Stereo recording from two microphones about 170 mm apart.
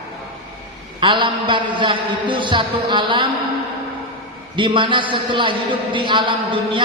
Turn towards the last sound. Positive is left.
turn(degrees=-30)  # may be behind; listen again after turning